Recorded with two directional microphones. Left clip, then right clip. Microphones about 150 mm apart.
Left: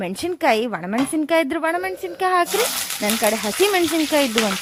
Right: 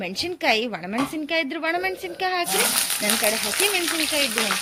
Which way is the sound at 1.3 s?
35° left (ahead or behind).